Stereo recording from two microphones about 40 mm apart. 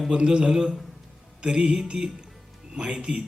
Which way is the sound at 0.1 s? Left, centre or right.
Right.